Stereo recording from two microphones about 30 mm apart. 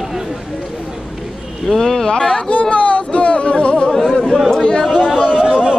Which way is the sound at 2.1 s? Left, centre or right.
Left.